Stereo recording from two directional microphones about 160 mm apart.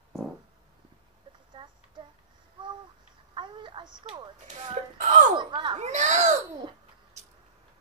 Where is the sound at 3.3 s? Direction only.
30° right (ahead or behind).